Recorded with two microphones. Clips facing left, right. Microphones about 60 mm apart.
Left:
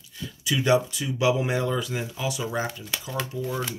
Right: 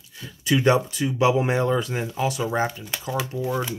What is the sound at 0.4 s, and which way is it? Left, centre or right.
Speech, right.